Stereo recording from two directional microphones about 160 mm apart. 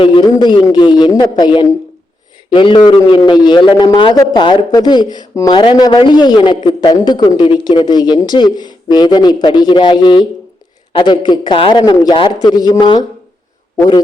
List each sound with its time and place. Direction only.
0.0 s a man's voice: 30° left (ahead or behind)